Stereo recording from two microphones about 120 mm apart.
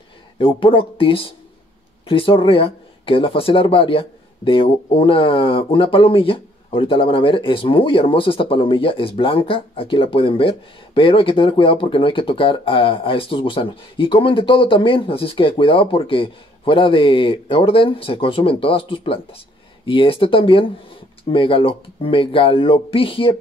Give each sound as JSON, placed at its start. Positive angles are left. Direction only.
{"t": 0.4, "sound": "speech", "side_deg": 45}